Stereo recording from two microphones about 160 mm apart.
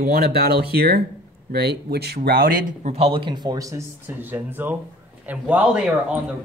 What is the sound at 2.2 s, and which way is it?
Speech, 65° right (ahead or behind).